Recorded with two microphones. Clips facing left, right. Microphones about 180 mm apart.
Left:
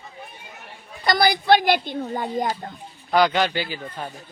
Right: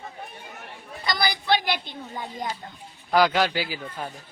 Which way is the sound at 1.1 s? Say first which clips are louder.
Left 7 dB; 55° left (ahead or behind).